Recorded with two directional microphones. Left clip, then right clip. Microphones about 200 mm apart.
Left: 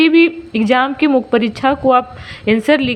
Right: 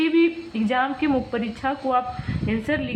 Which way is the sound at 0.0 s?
35° left (ahead or behind).